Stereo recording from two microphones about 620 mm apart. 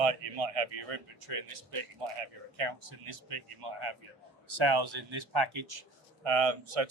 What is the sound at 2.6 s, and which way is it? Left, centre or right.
A man's voice, right.